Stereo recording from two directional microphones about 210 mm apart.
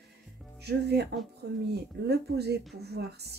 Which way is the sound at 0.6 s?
50° right (ahead or behind).